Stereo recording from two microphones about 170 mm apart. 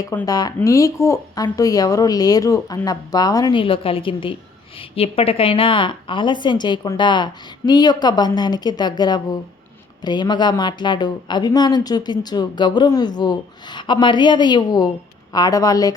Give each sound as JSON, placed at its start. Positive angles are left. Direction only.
{"t": 0.0, "sound": "speech", "side_deg": 20}